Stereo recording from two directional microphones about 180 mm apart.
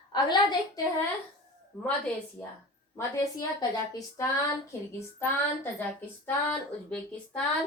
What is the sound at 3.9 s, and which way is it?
Speech, 20° left (ahead or behind).